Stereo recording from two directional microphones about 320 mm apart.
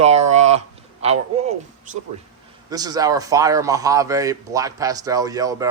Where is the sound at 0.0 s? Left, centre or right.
Right.